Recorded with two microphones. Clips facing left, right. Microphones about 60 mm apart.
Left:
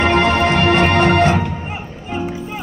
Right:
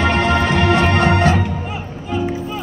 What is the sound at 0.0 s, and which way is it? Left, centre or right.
Music, left.